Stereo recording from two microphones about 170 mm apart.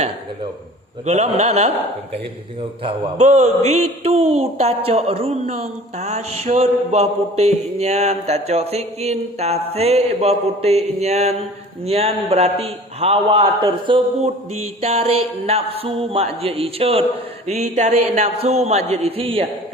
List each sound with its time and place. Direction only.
1.0 s a man's voice: 40° right (ahead or behind)